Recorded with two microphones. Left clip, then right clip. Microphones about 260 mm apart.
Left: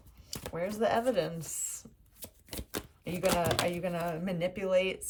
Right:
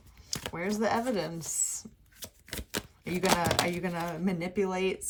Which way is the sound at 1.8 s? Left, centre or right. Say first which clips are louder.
Right 5 dB; centre.